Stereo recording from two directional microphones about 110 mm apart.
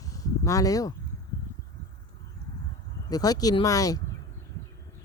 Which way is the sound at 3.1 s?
35° left (ahead or behind).